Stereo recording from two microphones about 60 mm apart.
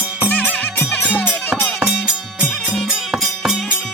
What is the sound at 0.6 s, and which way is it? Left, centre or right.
Music, left.